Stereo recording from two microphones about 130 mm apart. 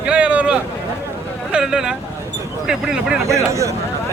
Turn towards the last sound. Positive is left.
turn(degrees=-25)  # may be behind; listen again after turning